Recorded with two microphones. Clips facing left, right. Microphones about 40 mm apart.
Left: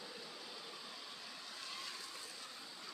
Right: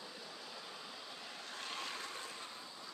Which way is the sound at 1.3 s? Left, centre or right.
Right.